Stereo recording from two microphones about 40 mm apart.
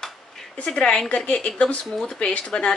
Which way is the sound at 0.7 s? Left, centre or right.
Left.